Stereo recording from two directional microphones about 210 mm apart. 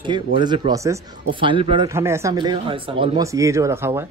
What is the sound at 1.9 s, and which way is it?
Speech, 10° right (ahead or behind).